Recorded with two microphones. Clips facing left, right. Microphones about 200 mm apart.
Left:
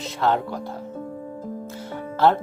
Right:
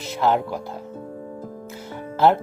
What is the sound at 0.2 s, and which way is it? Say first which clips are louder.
Speech: right 2 dB; 10° right (ahead or behind).